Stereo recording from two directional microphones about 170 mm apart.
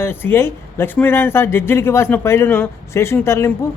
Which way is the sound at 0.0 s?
10° left (ahead or behind).